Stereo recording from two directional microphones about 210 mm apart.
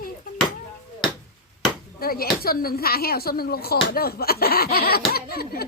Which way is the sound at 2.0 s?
45° left (ahead or behind).